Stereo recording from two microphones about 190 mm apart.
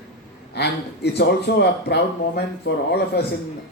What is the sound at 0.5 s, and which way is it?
Speech, 60° left (ahead or behind).